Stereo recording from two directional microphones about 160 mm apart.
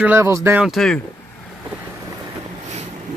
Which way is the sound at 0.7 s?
5° left (ahead or behind).